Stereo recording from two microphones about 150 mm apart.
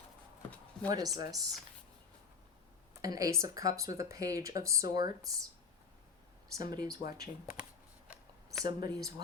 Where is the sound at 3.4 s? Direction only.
20° right (ahead or behind).